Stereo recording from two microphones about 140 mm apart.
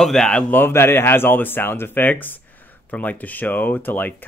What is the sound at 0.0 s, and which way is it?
Speech, 5° left (ahead or behind).